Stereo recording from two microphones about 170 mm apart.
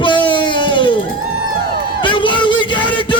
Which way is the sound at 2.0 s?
30° left (ahead or behind).